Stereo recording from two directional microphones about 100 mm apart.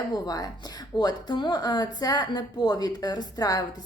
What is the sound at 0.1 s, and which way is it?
A woman's voice, 40° left (ahead or behind).